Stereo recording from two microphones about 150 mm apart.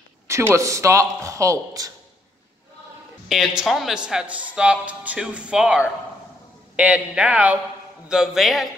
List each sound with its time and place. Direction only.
0.3 s speech: 20° right (ahead or behind)
3.3 s speech: 5° right (ahead or behind)